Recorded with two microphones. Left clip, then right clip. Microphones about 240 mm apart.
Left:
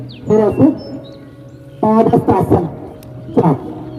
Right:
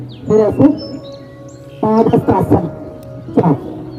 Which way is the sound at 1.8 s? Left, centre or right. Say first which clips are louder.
Left 1 dB; left.